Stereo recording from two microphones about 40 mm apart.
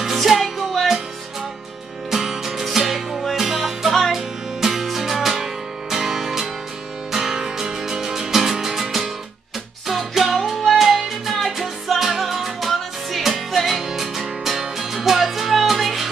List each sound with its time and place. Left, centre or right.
0.0 s music: centre
2.0 s music: centre